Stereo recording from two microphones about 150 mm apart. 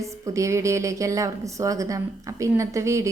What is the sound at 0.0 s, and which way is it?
A woman's voice, 20° right (ahead or behind).